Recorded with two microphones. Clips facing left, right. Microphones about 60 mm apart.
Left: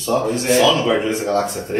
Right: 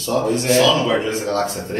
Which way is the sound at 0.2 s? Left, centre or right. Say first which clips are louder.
Right 2 dB; centre.